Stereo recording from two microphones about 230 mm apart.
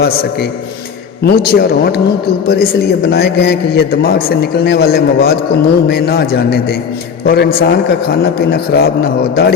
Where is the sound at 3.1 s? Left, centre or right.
Left.